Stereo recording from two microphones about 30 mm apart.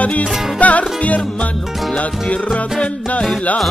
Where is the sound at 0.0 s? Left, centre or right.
Left.